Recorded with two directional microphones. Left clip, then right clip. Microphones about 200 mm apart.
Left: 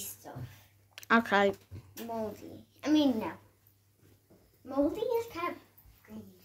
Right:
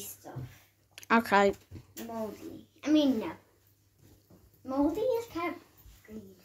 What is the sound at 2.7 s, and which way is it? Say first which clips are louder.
Speech: right 1 dB; 40° left (ahead or behind).